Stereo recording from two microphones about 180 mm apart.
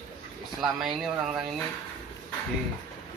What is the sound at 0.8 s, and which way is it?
Speech, centre (ahead or behind).